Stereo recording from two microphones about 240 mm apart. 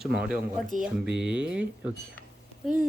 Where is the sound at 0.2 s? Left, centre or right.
Centre.